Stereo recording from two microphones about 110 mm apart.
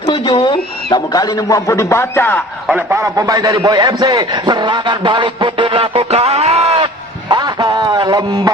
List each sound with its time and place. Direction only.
0.3 s speech: 40° left (ahead or behind); by 2.4 s 20° left (ahead or behind)
2.9 s a man's voice: 30° right (ahead or behind)